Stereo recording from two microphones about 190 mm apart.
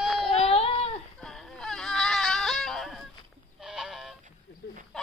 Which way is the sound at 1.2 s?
Centre (ahead or behind).